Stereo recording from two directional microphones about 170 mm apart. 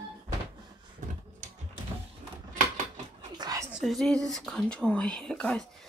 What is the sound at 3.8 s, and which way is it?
Speech, centre (ahead or behind).